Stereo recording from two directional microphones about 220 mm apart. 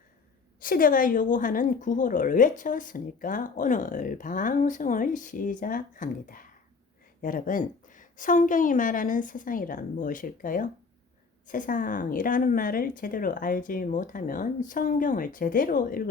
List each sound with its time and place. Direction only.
0.6 s a woman's voice: 40° left (ahead or behind)